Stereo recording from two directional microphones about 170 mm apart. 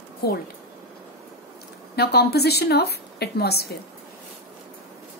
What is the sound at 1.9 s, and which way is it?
Speech, 70° left (ahead or behind).